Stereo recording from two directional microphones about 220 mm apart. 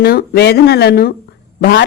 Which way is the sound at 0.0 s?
45° left (ahead or behind).